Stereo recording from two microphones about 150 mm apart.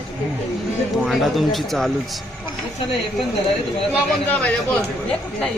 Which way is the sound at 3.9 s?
10° left (ahead or behind).